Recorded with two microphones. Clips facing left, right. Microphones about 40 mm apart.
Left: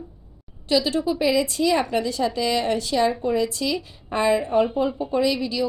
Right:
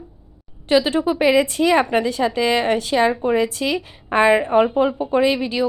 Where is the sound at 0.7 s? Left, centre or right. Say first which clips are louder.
Right 4 dB; right.